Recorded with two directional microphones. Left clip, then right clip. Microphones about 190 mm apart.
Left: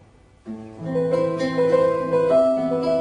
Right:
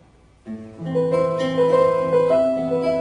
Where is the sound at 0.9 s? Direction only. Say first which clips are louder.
Right 2 dB; 25° right (ahead or behind).